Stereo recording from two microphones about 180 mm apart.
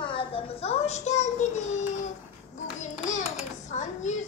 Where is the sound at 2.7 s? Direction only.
40° left (ahead or behind).